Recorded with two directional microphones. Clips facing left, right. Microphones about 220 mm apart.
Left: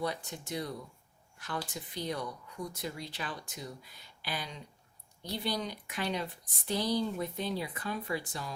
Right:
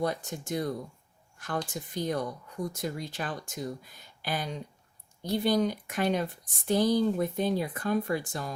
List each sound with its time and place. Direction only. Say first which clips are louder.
0.0 s speech: right 5 dB; 45° right (ahead or behind)
1.7 s speech: right 6 dB; 45° right (ahead or behind)